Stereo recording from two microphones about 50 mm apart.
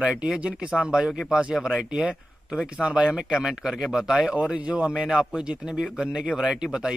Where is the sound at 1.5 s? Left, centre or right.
Centre.